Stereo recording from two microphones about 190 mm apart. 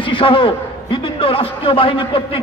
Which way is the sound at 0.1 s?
25° left (ahead or behind).